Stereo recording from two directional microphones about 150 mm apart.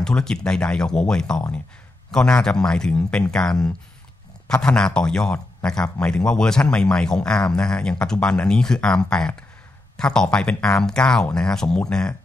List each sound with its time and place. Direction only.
0.0 s speech: 5° left (ahead or behind)